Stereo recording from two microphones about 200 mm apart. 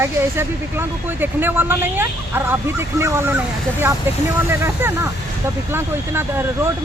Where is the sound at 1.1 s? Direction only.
10° right (ahead or behind).